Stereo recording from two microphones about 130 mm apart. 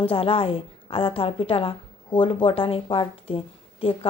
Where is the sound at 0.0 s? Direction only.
45° left (ahead or behind).